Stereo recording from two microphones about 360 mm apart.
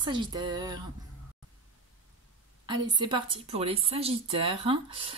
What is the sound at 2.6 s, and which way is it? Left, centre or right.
A woman's voice, centre.